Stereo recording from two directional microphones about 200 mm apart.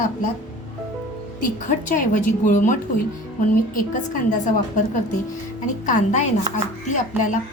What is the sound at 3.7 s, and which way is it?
Speech, 40° left (ahead or behind).